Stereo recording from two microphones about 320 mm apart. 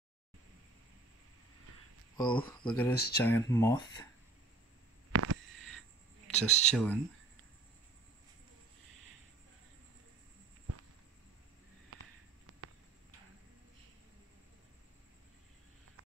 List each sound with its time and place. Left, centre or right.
2.1 s speech: centre
2.9 s speech: left
3.2 s speech: centre
5.1 s a sound: right
6.2 s speech: centre